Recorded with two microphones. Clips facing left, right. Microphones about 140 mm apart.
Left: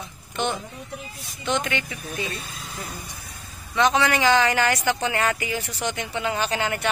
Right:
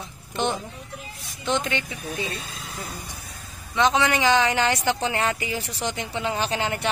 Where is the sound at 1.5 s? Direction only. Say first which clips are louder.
Even; 25° right (ahead or behind).